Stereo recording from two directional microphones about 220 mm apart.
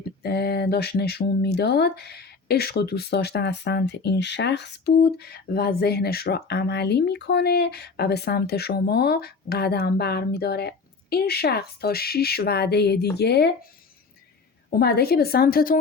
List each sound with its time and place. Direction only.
0.2 s speech: 45° left (ahead or behind)
14.7 s speech: 45° left (ahead or behind)